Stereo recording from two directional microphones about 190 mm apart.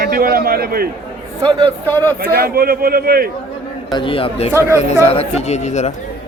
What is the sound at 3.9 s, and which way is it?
A man's voice, 30° left (ahead or behind).